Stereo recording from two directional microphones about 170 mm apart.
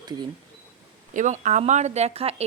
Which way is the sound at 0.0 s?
25° right (ahead or behind).